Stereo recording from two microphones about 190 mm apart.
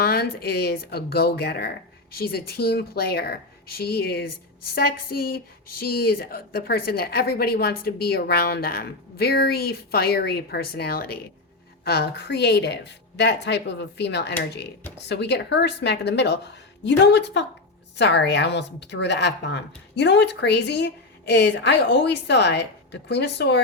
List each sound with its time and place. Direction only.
0.0 s a woman's voice: 55° left (ahead or behind)